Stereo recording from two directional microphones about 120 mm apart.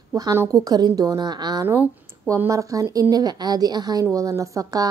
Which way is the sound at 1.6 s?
15° right (ahead or behind).